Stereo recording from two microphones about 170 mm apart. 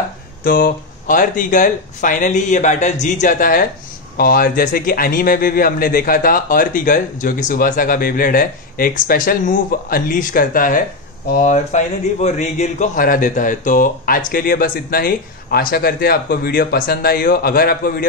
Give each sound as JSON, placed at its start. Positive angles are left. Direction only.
{"t": 0.4, "sound": "a man's voice", "side_deg": 55}
{"t": 11.3, "sound": "a man's voice", "side_deg": 45}